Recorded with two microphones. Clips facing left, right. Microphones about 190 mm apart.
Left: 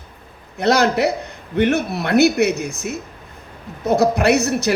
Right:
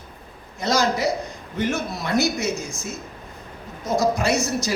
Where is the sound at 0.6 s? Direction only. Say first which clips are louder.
Left 5 dB; 65° left (ahead or behind).